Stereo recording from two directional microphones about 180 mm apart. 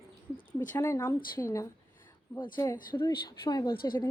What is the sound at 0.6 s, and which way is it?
Speech, 15° left (ahead or behind).